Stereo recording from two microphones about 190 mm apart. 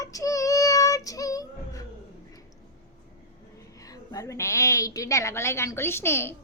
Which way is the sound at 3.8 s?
15° left (ahead or behind).